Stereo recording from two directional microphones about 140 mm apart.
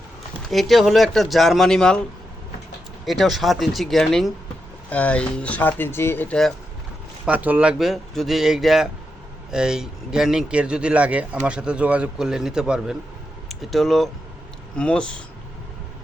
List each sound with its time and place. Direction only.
0.5 s speech: centre (ahead or behind)
3.1 s speech: centre (ahead or behind)
7.3 s speech: 10° right (ahead or behind); by 15.2 s 5° left (ahead or behind)